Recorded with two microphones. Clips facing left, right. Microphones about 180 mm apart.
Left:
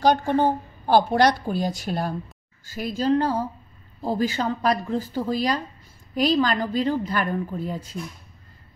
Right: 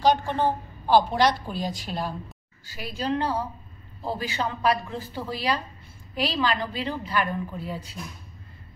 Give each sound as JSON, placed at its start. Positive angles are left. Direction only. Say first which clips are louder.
{"t": 0.0, "sound": "a woman's voice", "louder": "left 3 dB", "side_deg": 45}